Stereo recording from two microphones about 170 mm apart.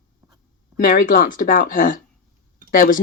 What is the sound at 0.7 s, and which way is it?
Speech, 55° left (ahead or behind).